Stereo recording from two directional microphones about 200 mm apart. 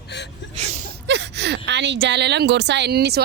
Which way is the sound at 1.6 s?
60° right (ahead or behind).